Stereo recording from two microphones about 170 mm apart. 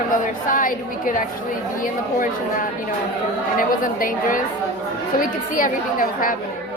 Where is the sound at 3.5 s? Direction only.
55° left (ahead or behind).